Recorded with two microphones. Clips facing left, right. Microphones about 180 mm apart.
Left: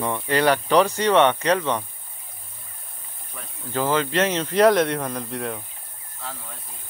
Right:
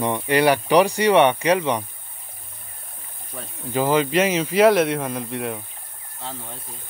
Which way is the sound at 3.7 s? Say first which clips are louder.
Right 3 dB; 15° right (ahead or behind).